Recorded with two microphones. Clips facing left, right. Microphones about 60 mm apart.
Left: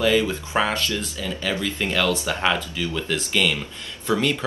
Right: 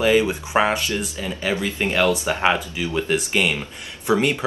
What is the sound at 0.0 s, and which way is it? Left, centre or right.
Speech, right.